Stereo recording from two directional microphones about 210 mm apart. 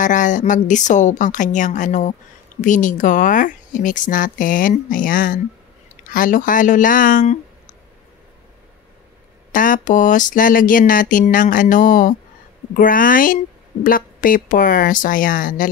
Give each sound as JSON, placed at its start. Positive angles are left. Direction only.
{"t": 0.0, "sound": "a woman's voice", "side_deg": 35}
{"t": 9.5, "sound": "a woman's voice", "side_deg": 40}